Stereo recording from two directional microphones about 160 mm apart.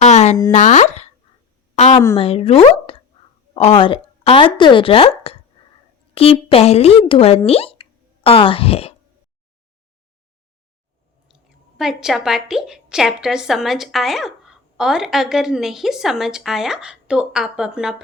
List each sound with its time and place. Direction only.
0.0 s a sound: 45° left (ahead or behind)
0.5 s a woman's voice: 45° left (ahead or behind)
11.8 s a woman's voice: centre (ahead or behind)